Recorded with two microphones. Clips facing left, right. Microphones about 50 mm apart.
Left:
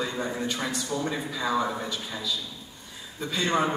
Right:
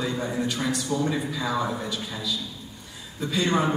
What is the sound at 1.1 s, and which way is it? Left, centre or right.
Speech, centre.